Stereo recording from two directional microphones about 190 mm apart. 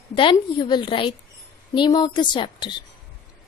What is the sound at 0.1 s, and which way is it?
A woman's voice, 25° left (ahead or behind).